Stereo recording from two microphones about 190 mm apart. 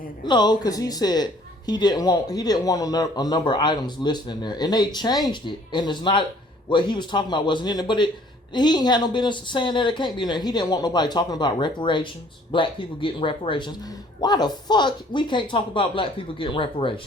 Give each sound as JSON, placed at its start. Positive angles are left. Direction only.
{"t": 0.3, "sound": "speech", "side_deg": 25}